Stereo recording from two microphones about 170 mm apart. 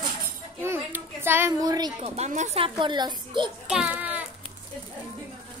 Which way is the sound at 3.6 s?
5° right (ahead or behind).